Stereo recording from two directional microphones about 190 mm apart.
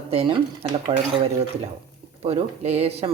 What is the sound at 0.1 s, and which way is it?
Speech, 30° right (ahead or behind).